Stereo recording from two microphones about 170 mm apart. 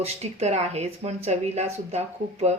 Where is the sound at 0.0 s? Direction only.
40° right (ahead or behind).